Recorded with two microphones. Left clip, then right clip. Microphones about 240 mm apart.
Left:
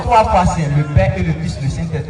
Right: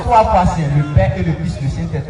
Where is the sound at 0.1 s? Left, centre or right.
Left.